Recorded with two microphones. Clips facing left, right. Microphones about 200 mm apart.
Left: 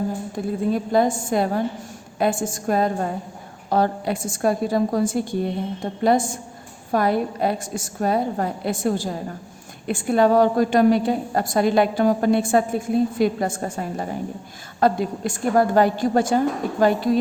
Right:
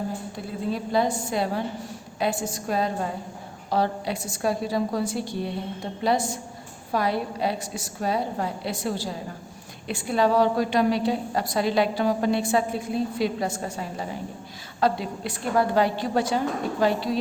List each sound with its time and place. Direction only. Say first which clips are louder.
0.3 s a woman's voice: left 8 dB; 50° left (ahead or behind)